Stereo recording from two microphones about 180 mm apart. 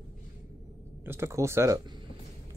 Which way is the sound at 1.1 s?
15° right (ahead or behind).